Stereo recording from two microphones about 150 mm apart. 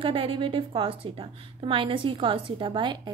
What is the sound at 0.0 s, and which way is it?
A woman's voice, 35° right (ahead or behind).